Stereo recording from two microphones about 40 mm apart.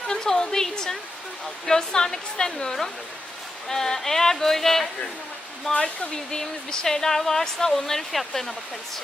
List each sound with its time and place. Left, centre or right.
0.1 s a sound: centre
1.6 s speech: centre
5.7 s speech: left
6.1 s speech: centre